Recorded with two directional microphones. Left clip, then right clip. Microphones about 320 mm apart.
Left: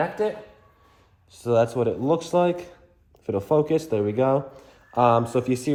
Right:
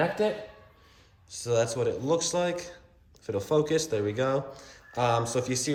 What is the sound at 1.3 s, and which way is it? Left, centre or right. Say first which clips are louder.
Speech: left 6 dB; centre.